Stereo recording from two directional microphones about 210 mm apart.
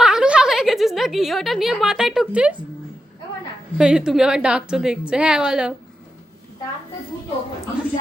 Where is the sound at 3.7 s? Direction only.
5° right (ahead or behind).